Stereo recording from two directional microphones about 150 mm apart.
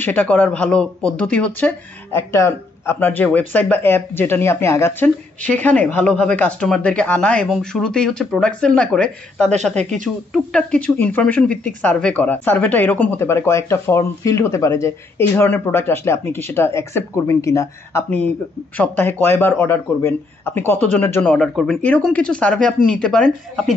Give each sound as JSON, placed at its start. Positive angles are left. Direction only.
{"t": 0.0, "sound": "speech", "side_deg": 10}